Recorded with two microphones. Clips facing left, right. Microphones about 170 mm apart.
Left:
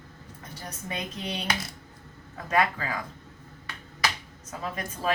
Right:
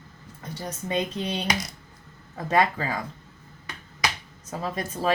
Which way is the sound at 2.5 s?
30° right (ahead or behind).